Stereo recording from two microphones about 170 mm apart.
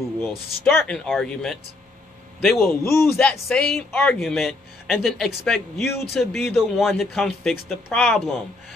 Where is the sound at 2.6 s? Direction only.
15° left (ahead or behind).